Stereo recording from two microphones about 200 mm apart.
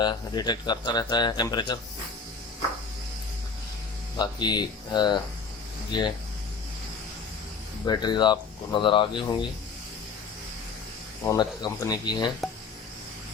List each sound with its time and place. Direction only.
0.0 s speech: 20° left (ahead or behind)
4.2 s speech: 20° left (ahead or behind)
7.9 s speech: 20° left (ahead or behind)
11.3 s speech: 20° left (ahead or behind)